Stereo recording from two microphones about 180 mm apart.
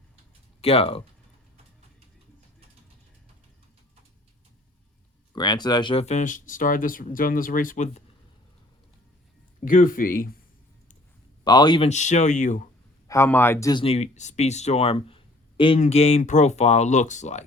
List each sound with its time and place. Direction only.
0.6 s speech: 30° left (ahead or behind)
5.3 s speech: 25° left (ahead or behind); by 8.0 s 45° left (ahead or behind)
9.6 s speech: 50° left (ahead or behind)
11.4 s speech: 25° left (ahead or behind)
11.9 s speech: 40° left (ahead or behind)
13.1 s speech: 15° left (ahead or behind)
13.8 s speech: 35° left (ahead or behind)